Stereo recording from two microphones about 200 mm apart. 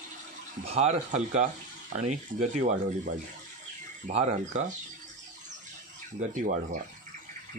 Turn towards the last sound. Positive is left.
turn(degrees=-40)  # may be behind; listen again after turning